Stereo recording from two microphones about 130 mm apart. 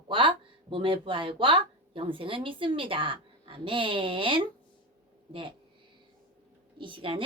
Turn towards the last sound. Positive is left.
turn(degrees=-45)  # may be behind; listen again after turning